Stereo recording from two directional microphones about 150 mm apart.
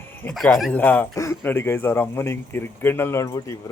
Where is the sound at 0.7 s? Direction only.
10° left (ahead or behind).